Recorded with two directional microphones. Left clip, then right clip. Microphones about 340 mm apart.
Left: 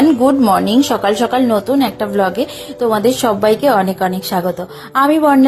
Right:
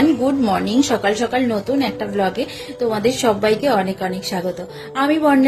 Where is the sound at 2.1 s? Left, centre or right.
Centre.